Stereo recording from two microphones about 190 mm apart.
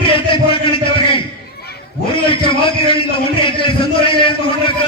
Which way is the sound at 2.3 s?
25° left (ahead or behind).